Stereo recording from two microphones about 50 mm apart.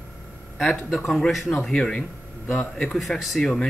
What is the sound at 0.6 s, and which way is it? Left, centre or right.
Speech, centre.